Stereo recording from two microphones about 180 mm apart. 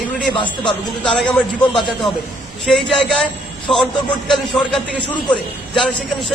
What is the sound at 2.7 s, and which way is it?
A man's voice, centre (ahead or behind).